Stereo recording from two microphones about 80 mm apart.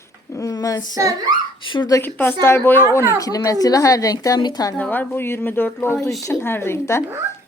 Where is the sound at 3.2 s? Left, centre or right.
Left.